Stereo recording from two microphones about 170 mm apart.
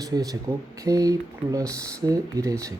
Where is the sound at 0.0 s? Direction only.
20° right (ahead or behind).